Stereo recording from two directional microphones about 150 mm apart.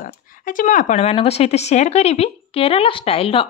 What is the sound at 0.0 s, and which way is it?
Speech, 70° left (ahead or behind).